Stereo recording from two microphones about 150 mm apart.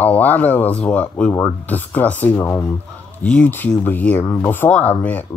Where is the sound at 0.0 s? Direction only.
10° left (ahead or behind).